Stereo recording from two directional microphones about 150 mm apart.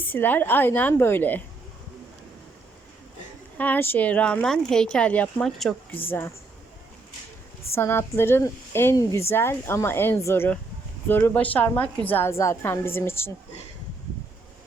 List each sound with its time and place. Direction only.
0.0 s a woman's voice: 10° left (ahead or behind)
3.6 s a woman's voice: 10° left (ahead or behind)
7.8 s a woman's voice: 15° left (ahead or behind)